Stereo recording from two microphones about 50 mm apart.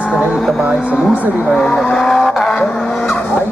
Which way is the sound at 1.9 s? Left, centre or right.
Centre.